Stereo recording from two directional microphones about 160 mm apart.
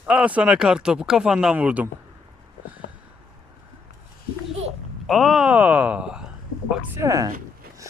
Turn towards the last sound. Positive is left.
turn(degrees=-20)  # may be behind; listen again after turning